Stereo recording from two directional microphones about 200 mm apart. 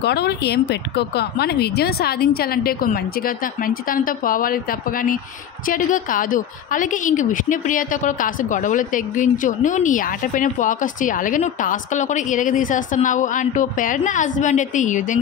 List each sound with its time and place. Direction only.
0.0 s a woman's voice: 55° left (ahead or behind); by 15.1 s 40° left (ahead or behind)